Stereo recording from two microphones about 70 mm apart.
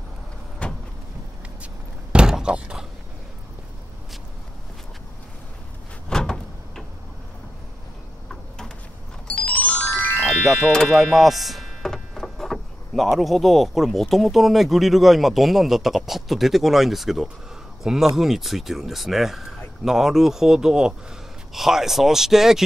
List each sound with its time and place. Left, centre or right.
0.6 s vehicle: centre
2.1 s a sound: centre
6.0 s door: centre
9.3 s music: left
10.1 s music: right
10.4 s speech: centre